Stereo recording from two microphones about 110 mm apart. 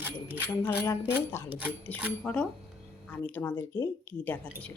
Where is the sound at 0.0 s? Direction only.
20° right (ahead or behind).